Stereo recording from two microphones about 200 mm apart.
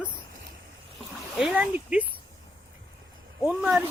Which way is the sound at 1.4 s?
5° right (ahead or behind).